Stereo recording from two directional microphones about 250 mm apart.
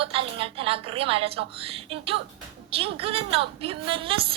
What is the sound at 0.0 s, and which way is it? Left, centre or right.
A woman's voice, right.